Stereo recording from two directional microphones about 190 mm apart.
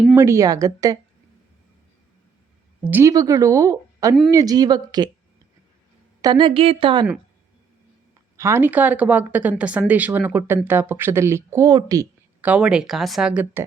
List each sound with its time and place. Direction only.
0.2 s speech: 15° right (ahead or behind)
2.8 s a woman's voice: 15° right (ahead or behind)
6.2 s a woman's voice: 25° right (ahead or behind)
8.4 s speech: 15° right (ahead or behind)
12.5 s speech: 5° right (ahead or behind)